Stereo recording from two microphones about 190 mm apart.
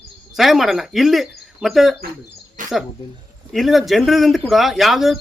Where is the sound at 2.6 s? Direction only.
45° right (ahead or behind).